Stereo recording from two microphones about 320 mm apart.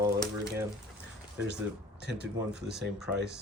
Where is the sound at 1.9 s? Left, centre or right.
Right.